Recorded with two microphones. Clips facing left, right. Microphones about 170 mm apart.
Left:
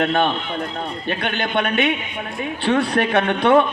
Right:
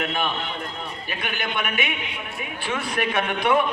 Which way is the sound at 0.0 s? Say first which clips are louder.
Left 7 dB; 65° left (ahead or behind).